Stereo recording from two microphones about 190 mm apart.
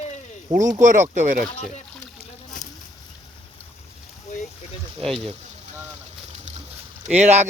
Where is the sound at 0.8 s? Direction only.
40° right (ahead or behind).